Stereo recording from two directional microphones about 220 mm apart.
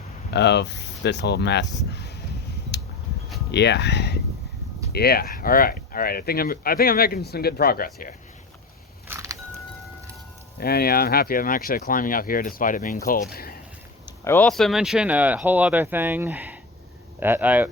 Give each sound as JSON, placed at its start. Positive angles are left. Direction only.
{"t": 0.3, "sound": "speech", "side_deg": 50}
{"t": 3.5, "sound": "speech", "side_deg": 50}
{"t": 9.0, "sound": "music", "side_deg": -15}
{"t": 10.6, "sound": "speech", "side_deg": 45}
{"t": 13.3, "sound": "a sound", "side_deg": 45}
{"t": 14.3, "sound": "speech", "side_deg": 5}